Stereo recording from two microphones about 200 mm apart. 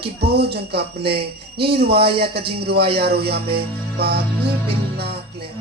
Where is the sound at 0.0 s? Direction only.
55° right (ahead or behind).